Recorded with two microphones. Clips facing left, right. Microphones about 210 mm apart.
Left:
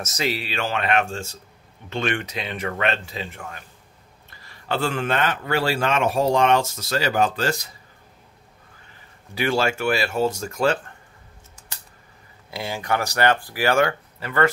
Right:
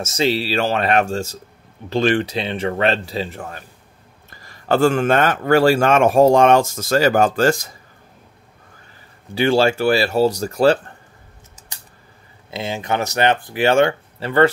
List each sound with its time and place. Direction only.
0.0 s a man's voice: 30° right (ahead or behind); by 7.7 s 45° right (ahead or behind)
9.3 s speech: 30° right (ahead or behind)
12.4 s speech: 20° right (ahead or behind)